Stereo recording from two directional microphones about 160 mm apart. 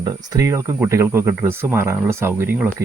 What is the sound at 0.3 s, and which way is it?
Speech, 20° right (ahead or behind).